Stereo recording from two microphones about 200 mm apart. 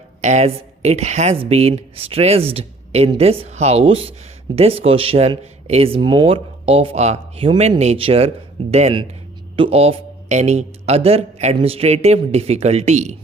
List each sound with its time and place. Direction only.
0.2 s speech: 35° right (ahead or behind)